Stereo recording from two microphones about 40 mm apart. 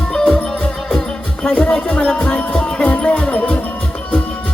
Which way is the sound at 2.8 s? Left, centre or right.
Left.